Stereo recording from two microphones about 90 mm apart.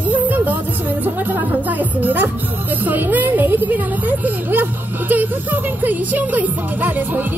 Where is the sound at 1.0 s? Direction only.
20° right (ahead or behind).